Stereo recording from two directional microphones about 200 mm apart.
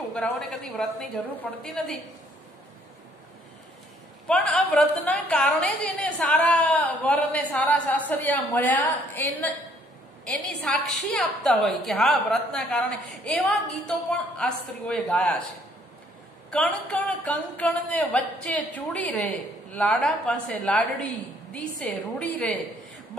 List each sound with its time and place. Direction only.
0.1 s speech: 5° left (ahead or behind)
4.3 s a woman's voice: centre (ahead or behind)
16.4 s speech: 5° left (ahead or behind)